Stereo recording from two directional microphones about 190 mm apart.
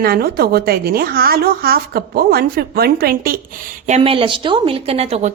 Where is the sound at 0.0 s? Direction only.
55° right (ahead or behind); by 5.3 s 35° right (ahead or behind).